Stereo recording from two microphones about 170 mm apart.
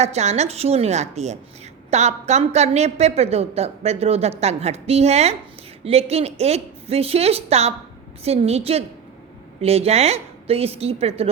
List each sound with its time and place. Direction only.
0.0 s a woman's voice: 40° right (ahead or behind)